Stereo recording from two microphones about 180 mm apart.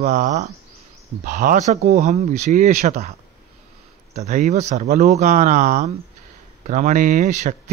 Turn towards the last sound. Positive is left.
turn(degrees=-40)  # may be behind; listen again after turning